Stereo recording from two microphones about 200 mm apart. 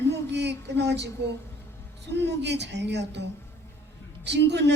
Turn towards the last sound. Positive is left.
turn(degrees=-60)  # may be behind; listen again after turning